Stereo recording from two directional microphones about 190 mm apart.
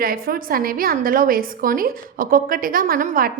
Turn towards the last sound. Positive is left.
turn(degrees=-50)  # may be behind; listen again after turning